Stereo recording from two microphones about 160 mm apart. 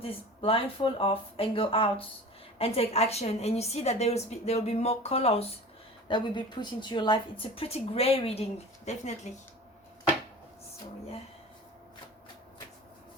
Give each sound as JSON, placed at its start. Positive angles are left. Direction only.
{"t": 0.0, "sound": "speech", "side_deg": 35}